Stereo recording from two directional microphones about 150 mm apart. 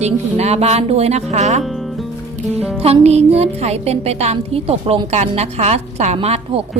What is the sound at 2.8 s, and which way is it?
A woman's voice, 45° right (ahead or behind).